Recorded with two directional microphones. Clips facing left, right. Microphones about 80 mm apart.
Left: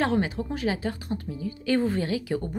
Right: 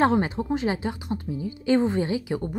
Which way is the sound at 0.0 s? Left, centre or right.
Right.